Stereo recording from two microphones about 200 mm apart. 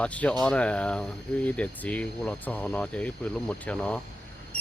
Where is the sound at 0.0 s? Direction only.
5° left (ahead or behind).